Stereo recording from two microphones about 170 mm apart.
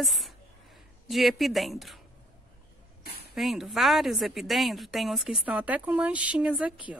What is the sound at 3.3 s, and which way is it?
A woman's voice, centre (ahead or behind).